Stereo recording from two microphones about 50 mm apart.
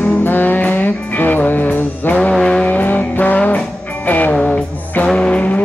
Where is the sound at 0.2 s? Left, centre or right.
Left.